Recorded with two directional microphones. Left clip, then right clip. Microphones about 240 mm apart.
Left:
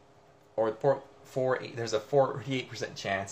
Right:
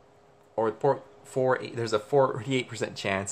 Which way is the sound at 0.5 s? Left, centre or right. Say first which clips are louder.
Right 2 dB; right.